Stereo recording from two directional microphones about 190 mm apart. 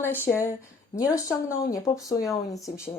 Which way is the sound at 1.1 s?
15° left (ahead or behind).